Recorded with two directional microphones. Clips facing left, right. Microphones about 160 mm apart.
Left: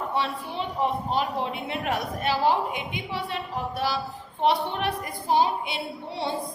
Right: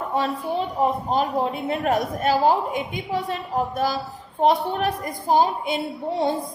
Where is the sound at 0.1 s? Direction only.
45° right (ahead or behind).